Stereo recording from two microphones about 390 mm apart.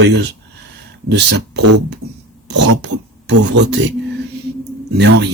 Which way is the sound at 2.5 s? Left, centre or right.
Right.